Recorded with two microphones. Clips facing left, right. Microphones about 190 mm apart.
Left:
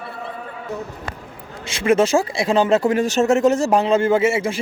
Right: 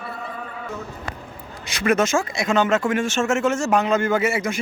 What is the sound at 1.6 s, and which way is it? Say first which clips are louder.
Speech: left 3 dB; 25° left (ahead or behind).